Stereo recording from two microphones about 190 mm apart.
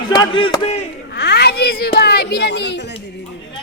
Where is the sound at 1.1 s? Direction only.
60° left (ahead or behind).